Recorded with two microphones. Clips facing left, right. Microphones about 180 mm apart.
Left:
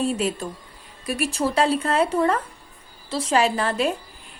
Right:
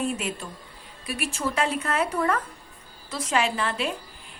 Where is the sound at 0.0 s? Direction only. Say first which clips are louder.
Left 5 dB; 35° left (ahead or behind).